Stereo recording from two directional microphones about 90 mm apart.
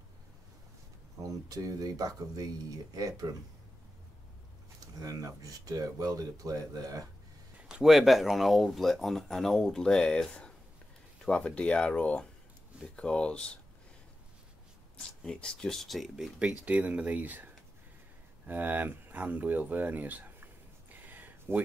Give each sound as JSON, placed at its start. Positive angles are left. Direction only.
{"t": 1.2, "sound": "speech", "side_deg": -40}
{"t": 4.9, "sound": "speech", "side_deg": -40}
{"t": 7.6, "sound": "speech", "side_deg": -5}
{"t": 15.0, "sound": "speech", "side_deg": 10}
{"t": 16.3, "sound": "speech", "side_deg": -15}
{"t": 18.5, "sound": "speech", "side_deg": -20}
{"t": 20.9, "sound": "a sound", "side_deg": -20}